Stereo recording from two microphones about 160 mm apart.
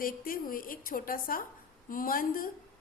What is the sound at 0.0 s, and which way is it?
A woman's voice, 60° left (ahead or behind).